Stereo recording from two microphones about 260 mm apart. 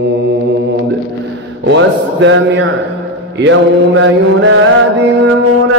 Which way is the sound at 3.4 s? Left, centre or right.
Right.